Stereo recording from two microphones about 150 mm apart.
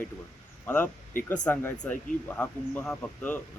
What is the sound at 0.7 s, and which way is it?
Speech, 15° left (ahead or behind).